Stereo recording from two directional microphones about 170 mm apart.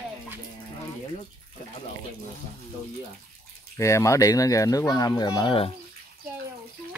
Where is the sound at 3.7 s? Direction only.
15° left (ahead or behind).